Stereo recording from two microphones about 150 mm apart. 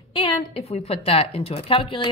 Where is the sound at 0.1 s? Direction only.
35° left (ahead or behind).